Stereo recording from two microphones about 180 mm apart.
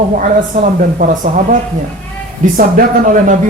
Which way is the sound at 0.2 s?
50° right (ahead or behind).